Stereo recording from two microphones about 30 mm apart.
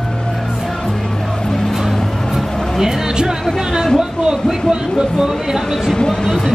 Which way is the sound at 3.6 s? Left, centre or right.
Centre.